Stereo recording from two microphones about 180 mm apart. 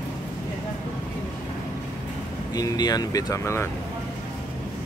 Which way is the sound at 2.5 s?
20° left (ahead or behind).